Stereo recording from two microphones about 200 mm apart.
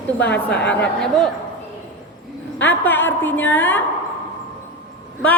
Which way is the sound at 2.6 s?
10° left (ahead or behind).